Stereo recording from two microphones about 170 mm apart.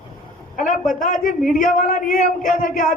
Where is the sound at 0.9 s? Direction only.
50° left (ahead or behind).